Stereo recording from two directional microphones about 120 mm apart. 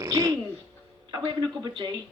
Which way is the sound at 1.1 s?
40° right (ahead or behind).